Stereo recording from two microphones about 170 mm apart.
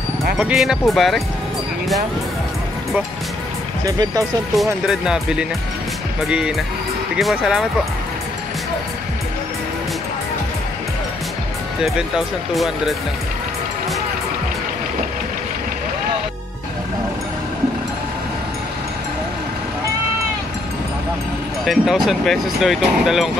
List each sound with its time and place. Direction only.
0.4 s speech: 5° right (ahead or behind)
3.8 s speech: 20° right (ahead or behind)
4.8 s speech: 5° right (ahead or behind)
12.5 s speech: centre (ahead or behind)
21.6 s speech: centre (ahead or behind)